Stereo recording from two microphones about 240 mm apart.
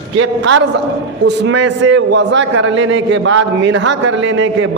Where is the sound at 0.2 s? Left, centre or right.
Right.